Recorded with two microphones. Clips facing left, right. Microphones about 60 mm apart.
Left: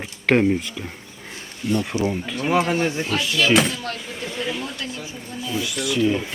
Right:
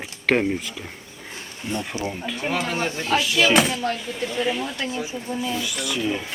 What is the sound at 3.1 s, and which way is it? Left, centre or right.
Speech, centre.